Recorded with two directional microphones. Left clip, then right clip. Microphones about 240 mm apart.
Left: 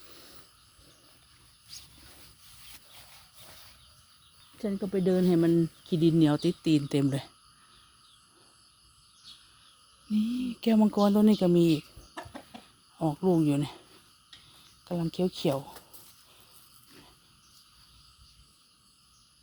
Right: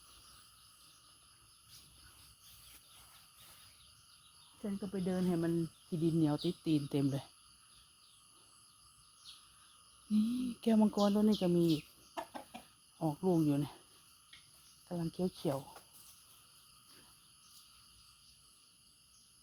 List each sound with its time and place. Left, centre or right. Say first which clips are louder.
4.6 s speech: left 12 dB; left
10.1 s a sound: left 5 dB; centre
14.8 s speech: left 8 dB; left